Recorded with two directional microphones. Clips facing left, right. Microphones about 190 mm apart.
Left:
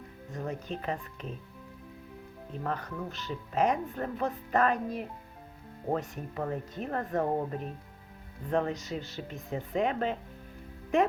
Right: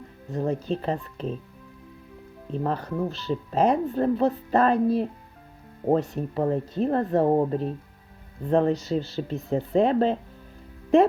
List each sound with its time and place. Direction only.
0.3 s speech: 30° right (ahead or behind)
2.5 s speech: 30° right (ahead or behind)
8.4 s speech: 30° right (ahead or behind)